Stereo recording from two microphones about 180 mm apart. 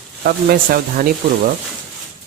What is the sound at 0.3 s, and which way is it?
Speech, 55° right (ahead or behind).